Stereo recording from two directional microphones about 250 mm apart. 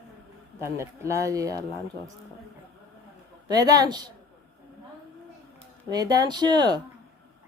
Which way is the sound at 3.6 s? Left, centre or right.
Centre.